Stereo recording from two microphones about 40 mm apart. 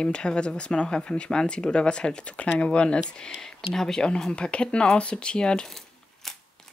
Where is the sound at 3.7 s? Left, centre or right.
Centre.